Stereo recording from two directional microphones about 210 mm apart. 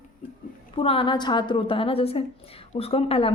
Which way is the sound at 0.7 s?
25° left (ahead or behind).